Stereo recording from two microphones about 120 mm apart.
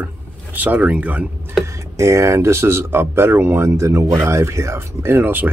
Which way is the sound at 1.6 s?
25° right (ahead or behind).